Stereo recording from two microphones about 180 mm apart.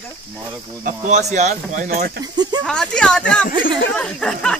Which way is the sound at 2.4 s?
25° right (ahead or behind).